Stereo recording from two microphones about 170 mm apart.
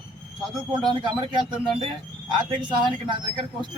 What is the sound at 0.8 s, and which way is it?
Speech, 30° right (ahead or behind).